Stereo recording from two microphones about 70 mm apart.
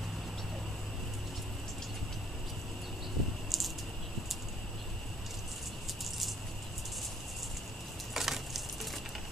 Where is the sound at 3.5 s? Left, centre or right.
Centre.